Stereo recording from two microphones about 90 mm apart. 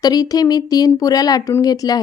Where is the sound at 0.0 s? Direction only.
45° left (ahead or behind).